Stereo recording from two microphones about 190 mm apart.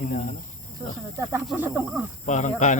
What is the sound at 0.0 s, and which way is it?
Speech, 45° left (ahead or behind).